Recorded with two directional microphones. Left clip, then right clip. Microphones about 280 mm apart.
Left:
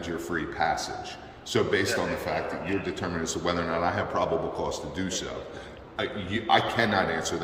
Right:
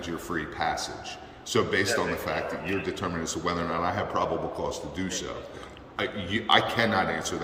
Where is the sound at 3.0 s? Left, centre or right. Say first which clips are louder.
Left 1 dB; centre.